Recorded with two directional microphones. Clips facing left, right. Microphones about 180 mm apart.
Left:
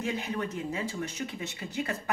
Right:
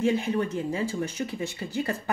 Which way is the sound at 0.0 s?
30° right (ahead or behind).